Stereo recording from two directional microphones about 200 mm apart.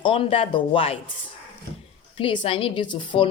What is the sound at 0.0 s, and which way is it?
Speech, 25° left (ahead or behind).